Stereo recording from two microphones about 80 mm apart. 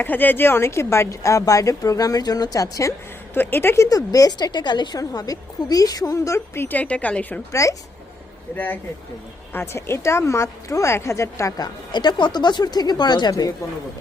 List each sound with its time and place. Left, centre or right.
0.0 s speech: left
3.3 s speech: left
3.8 s speech: left
4.9 s speech: left
6.7 s speech: centre
7.5 s speech: left
8.5 s a woman's voice: left
11.5 s speech: left